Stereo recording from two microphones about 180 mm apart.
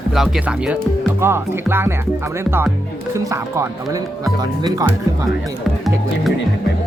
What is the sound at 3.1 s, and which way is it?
Speech, 15° right (ahead or behind).